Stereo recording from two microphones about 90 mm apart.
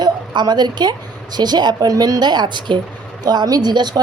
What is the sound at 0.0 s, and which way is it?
A woman's voice, 50° right (ahead or behind).